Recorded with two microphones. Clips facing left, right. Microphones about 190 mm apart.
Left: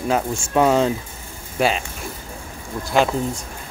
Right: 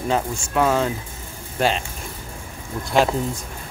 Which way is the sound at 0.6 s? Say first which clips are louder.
Left 3 dB; 15° left (ahead or behind).